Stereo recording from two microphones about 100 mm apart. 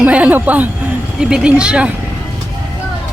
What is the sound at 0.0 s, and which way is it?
Speech, 15° right (ahead or behind).